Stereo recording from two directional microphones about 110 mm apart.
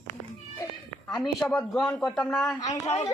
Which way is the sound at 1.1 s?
Centre (ahead or behind).